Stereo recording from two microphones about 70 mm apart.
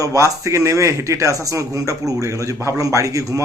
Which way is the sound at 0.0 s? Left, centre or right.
Right.